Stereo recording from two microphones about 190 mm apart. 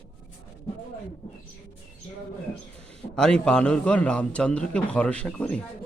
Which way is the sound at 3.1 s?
5° left (ahead or behind).